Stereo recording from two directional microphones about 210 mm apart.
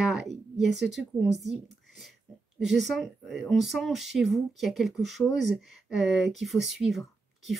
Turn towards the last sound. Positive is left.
turn(degrees=0)  # may be behind; listen again after turning